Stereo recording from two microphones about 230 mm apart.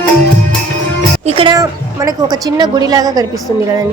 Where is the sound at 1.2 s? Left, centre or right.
Right.